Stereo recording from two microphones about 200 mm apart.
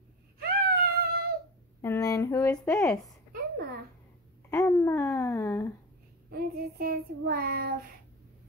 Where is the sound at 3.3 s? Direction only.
50° right (ahead or behind).